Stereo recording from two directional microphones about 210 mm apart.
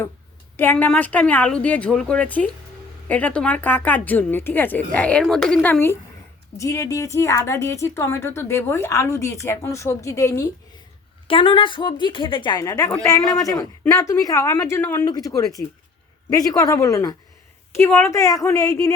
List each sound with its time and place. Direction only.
0.5 s a woman's voice: 10° left (ahead or behind)